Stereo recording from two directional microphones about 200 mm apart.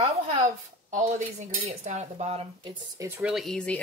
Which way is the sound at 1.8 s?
35° right (ahead or behind).